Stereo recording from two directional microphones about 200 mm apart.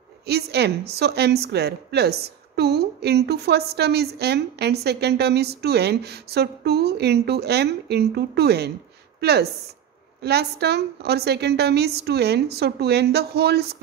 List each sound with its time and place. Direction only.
0.3 s a woman's voice: 55° right (ahead or behind)